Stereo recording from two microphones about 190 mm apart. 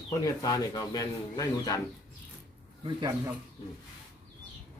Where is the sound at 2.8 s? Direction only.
20° right (ahead or behind).